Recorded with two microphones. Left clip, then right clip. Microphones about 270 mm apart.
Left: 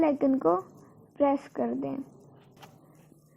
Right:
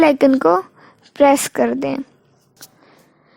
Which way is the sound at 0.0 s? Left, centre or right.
Right.